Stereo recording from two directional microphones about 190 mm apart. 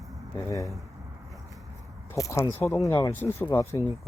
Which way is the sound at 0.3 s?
15° left (ahead or behind).